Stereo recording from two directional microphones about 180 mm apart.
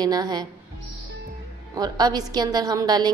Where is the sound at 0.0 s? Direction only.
20° right (ahead or behind).